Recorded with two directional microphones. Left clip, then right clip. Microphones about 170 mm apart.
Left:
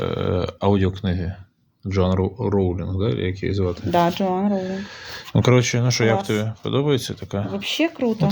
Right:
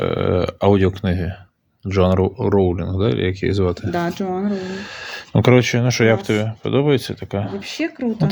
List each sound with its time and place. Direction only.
0.0 s a sound: 35° right (ahead or behind)
1.8 s speech: 40° right (ahead or behind); by 3.8 s 55° right (ahead or behind)
3.9 s speech: 20° left (ahead or behind)
4.5 s speech: 55° right (ahead or behind)
5.3 s speech: 30° right (ahead or behind)
7.6 s speech: 20° left (ahead or behind)